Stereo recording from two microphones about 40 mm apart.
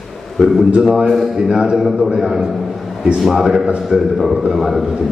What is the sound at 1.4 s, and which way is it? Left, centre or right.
Speech, centre.